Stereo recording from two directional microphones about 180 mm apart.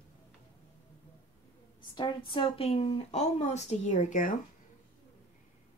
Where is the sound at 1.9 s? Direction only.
25° left (ahead or behind); by 4.3 s 45° left (ahead or behind).